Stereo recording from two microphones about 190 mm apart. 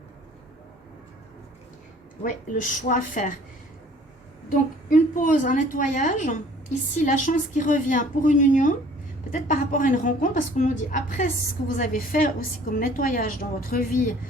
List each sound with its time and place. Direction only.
2.2 s a woman's voice: 45° left (ahead or behind)
4.4 s a woman's voice: 45° left (ahead or behind)